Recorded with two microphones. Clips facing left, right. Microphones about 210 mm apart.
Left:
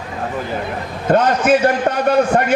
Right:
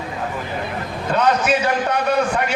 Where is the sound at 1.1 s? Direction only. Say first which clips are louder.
Left 5 dB; 50° left (ahead or behind).